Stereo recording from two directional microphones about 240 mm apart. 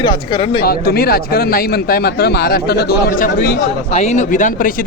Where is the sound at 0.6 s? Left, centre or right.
Left.